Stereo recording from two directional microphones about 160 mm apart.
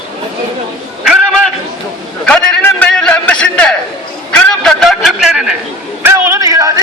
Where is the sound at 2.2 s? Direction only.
5° left (ahead or behind).